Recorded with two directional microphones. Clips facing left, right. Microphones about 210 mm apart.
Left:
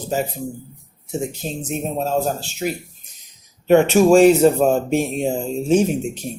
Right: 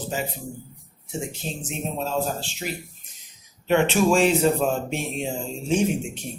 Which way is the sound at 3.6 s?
45° left (ahead or behind).